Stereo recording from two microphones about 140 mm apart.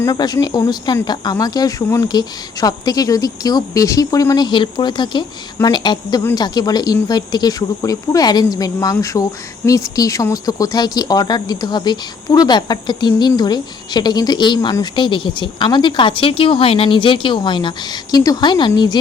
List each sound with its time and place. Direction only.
0.0 s speech: 25° left (ahead or behind)